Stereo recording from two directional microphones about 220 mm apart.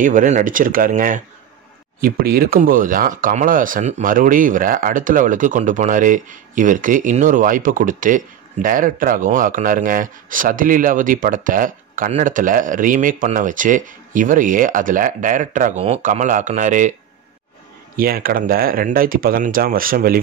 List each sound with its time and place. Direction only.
0.0 s speech: 35° right (ahead or behind)
17.9 s speech: 40° right (ahead or behind)